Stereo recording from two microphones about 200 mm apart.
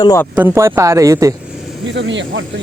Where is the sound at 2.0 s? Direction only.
65° right (ahead or behind).